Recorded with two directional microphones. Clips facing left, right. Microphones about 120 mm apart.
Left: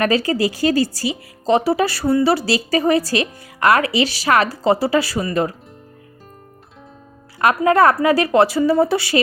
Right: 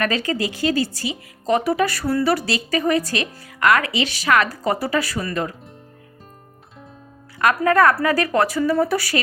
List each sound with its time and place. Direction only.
0.0 s speech: 30° left (ahead or behind)
7.3 s speech: 25° left (ahead or behind)